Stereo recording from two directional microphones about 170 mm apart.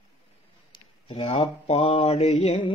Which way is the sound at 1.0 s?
35° left (ahead or behind).